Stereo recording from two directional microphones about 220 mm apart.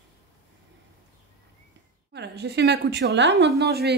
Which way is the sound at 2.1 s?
50° right (ahead or behind).